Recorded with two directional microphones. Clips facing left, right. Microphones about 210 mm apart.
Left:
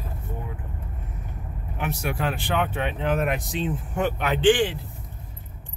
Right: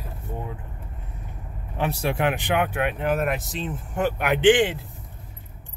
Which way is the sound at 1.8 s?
35° right (ahead or behind).